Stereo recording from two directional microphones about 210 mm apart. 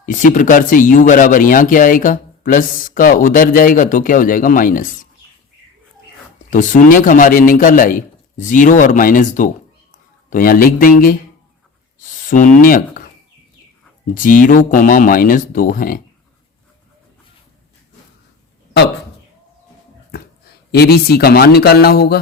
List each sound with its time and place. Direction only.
0.0 s speech: 40° left (ahead or behind)
6.5 s speech: 40° left (ahead or behind)
12.3 s speech: 40° left (ahead or behind)
14.1 s speech: 40° left (ahead or behind)
20.7 s speech: 50° left (ahead or behind)